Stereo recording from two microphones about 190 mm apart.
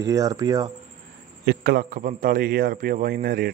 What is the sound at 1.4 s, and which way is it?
A man's voice, 50° right (ahead or behind).